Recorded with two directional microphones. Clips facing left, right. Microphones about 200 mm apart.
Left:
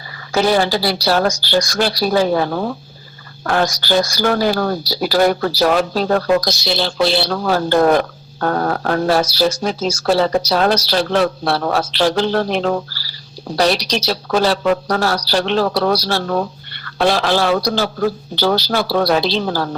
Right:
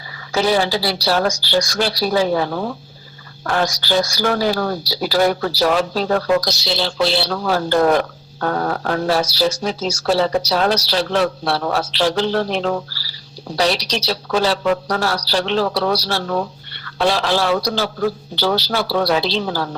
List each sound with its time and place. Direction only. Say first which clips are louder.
0.3 s speech: left 2 dB; 50° left (ahead or behind)